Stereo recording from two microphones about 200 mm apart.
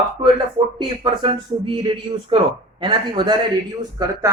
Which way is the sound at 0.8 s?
25° right (ahead or behind).